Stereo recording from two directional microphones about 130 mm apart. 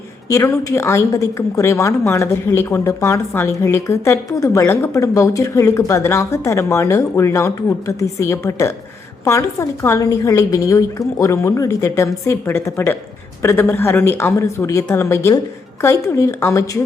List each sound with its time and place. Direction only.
0.3 s a woman's voice: 20° left (ahead or behind)